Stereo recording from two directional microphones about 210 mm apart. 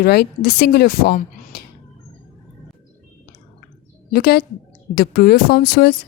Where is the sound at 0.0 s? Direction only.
45° left (ahead or behind).